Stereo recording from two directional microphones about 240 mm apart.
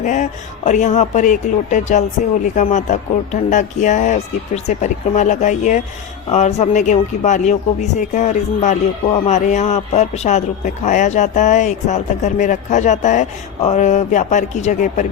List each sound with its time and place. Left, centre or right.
0.0 s speech: left